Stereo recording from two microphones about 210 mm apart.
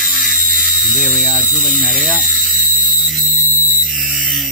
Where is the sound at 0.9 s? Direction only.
Centre (ahead or behind).